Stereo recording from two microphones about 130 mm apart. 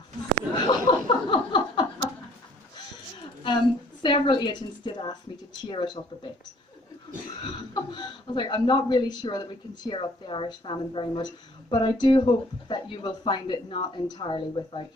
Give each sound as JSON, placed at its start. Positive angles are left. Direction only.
{"t": 0.5, "sound": "laughter", "side_deg": 35}
{"t": 4.0, "sound": "a woman's voice", "side_deg": 35}
{"t": 7.4, "sound": "speech", "side_deg": 35}